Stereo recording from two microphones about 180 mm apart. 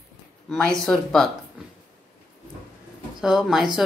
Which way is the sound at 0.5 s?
5° left (ahead or behind).